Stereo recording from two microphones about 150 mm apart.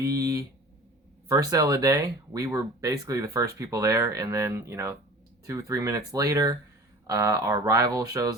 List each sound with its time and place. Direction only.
0.0 s speech: 25° right (ahead or behind)